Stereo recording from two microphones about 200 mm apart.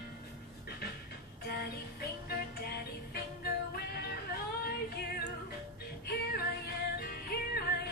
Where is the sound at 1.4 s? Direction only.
50° left (ahead or behind).